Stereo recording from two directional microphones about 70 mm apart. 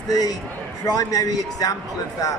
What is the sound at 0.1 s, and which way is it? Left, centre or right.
A man's voice, left.